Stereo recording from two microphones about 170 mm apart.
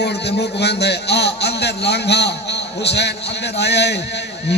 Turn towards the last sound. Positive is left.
turn(degrees=80)